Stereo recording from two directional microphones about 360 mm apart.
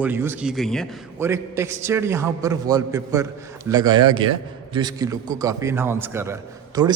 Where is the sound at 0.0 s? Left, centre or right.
Centre.